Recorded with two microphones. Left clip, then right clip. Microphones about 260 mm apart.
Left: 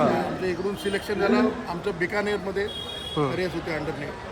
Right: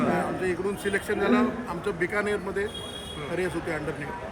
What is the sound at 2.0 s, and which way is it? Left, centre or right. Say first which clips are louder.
Speech: left 1 dB; centre.